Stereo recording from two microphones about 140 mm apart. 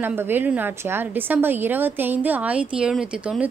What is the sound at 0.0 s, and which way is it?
A woman's voice, 15° right (ahead or behind).